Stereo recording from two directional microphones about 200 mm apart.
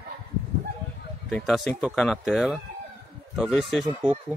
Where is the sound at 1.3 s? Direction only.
Centre (ahead or behind).